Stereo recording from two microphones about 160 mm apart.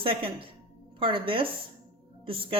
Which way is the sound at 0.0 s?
35° right (ahead or behind).